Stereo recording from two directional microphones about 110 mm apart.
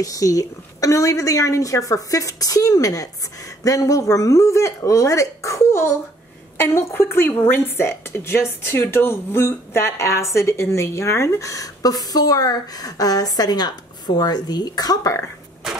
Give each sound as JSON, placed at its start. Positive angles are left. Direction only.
{"t": 0.0, "sound": "a woman's voice", "side_deg": 30}